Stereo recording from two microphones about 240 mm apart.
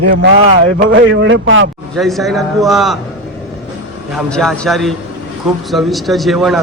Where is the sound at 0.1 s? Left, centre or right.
Right.